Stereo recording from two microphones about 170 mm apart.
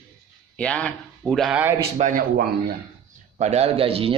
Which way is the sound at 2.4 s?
65° right (ahead or behind).